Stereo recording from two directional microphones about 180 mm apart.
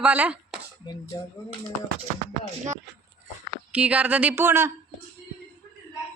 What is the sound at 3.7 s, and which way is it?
Speech, 5° right (ahead or behind).